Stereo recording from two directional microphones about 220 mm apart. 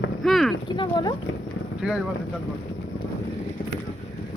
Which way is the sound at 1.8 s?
5° right (ahead or behind).